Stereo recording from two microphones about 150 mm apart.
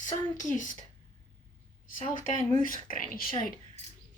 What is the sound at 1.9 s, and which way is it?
Speech, 60° left (ahead or behind).